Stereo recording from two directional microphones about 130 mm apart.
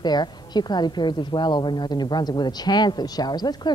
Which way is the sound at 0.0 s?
35° left (ahead or behind).